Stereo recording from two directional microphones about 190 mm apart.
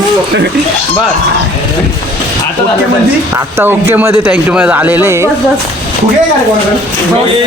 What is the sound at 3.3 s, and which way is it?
Speech, 10° right (ahead or behind).